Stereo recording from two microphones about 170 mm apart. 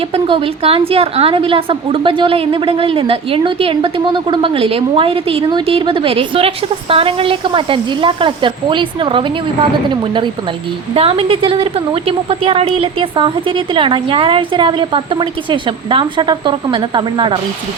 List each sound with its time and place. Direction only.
0.1 s a woman's voice: 35° right (ahead or behind)